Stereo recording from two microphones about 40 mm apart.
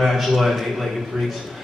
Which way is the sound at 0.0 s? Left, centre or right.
Centre.